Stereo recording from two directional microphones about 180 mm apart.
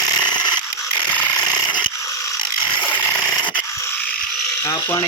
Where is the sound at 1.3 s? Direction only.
25° left (ahead or behind).